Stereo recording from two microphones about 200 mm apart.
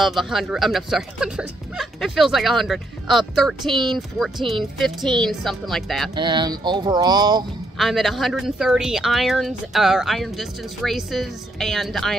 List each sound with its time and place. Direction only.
0.0 s speech: centre (ahead or behind)
6.1 s speech: 20° right (ahead or behind)
7.7 s speech: centre (ahead or behind)